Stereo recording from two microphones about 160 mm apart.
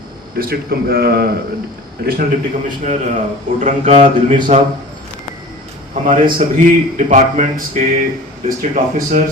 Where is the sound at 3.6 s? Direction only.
50° right (ahead or behind).